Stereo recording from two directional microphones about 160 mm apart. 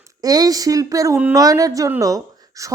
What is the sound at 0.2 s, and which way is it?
Speech, 25° right (ahead or behind).